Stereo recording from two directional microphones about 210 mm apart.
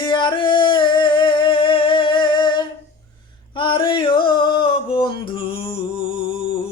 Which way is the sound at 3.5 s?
25° left (ahead or behind).